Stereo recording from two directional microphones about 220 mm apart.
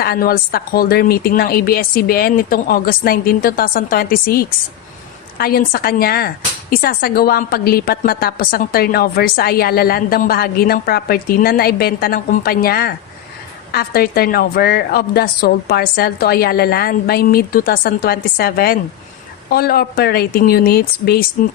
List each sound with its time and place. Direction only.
0.0 s speech: 45° left (ahead or behind)